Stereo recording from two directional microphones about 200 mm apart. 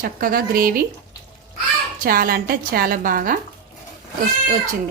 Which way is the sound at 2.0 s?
45° right (ahead or behind).